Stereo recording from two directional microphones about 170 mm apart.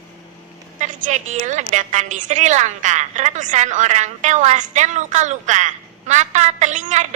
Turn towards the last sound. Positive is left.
turn(degrees=-45)  # may be behind; listen again after turning